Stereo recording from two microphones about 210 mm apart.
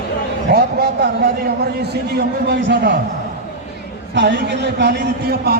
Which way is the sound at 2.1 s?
55° right (ahead or behind).